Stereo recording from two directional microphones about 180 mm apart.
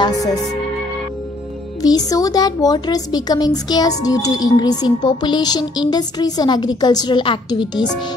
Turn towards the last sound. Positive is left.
turn(degrees=25)  # may be behind; listen again after turning